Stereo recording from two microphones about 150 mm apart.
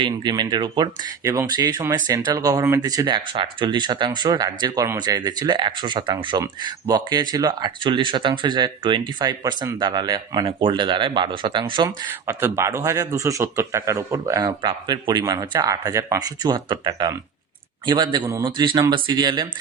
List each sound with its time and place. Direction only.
0.0 s speech: 30° right (ahead or behind)
12.3 s speech: 20° right (ahead or behind)